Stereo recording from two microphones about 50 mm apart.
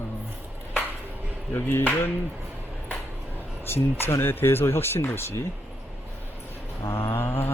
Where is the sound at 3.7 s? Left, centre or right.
Left.